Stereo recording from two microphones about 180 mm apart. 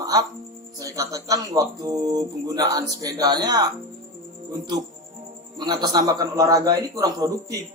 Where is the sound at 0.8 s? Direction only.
20° right (ahead or behind).